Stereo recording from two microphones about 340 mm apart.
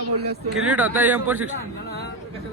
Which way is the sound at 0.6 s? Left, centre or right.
Centre.